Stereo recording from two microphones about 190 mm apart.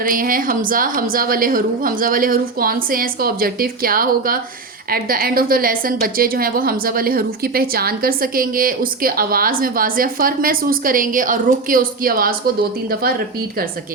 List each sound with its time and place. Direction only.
0.0 s a woman's voice: 45° right (ahead or behind)